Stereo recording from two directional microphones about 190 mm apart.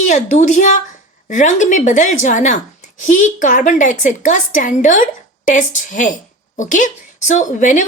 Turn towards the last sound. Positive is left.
turn(degrees=40)  # may be behind; listen again after turning